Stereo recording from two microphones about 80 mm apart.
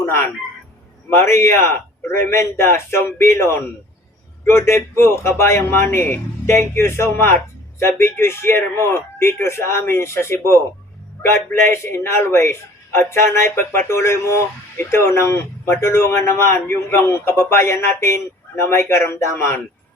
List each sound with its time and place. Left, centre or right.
0.0 s speech: left
11.7 s speech: left